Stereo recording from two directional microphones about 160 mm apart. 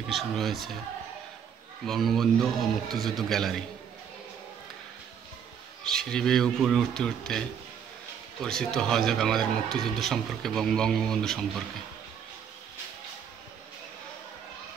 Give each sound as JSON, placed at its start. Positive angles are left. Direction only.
{"t": 0.1, "sound": "speech", "side_deg": 0}
{"t": 1.9, "sound": "speech", "side_deg": 0}
{"t": 5.9, "sound": "speech", "side_deg": 5}